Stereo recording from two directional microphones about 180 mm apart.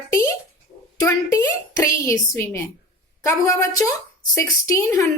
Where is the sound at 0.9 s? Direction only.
20° left (ahead or behind).